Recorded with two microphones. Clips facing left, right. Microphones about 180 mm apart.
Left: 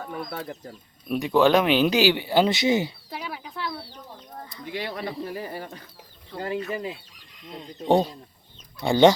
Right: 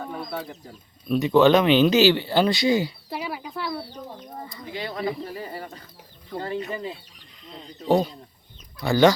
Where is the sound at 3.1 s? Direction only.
5° right (ahead or behind).